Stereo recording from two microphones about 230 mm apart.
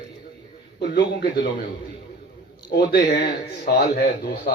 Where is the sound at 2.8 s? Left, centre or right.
Left.